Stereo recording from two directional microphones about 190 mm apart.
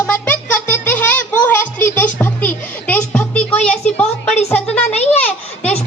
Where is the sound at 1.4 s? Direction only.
10° left (ahead or behind).